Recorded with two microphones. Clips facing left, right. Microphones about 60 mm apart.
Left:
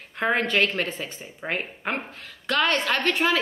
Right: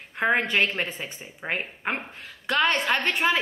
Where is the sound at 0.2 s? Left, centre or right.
Centre.